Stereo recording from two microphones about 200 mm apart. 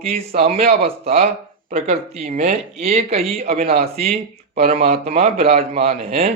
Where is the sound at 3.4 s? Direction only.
50° right (ahead or behind).